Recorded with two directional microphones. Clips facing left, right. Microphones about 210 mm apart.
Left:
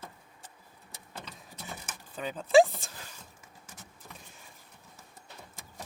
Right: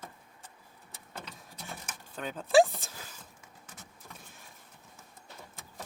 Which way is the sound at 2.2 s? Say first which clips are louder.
Left 2 dB; centre (ahead or behind).